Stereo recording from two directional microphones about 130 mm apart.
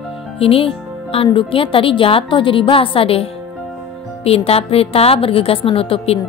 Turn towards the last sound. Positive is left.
turn(degrees=45)  # may be behind; listen again after turning